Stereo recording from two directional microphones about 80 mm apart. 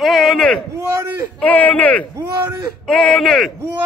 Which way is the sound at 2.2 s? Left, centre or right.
Right.